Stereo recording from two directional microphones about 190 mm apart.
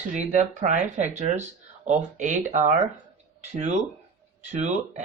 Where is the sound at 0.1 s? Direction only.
40° right (ahead or behind).